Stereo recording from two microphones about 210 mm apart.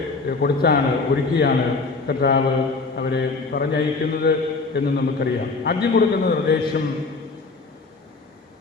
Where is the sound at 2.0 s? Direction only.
50° left (ahead or behind).